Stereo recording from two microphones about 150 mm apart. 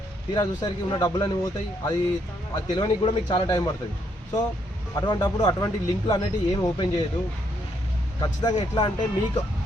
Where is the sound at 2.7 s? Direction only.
30° left (ahead or behind).